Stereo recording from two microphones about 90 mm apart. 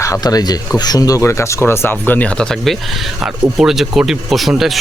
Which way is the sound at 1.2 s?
30° left (ahead or behind).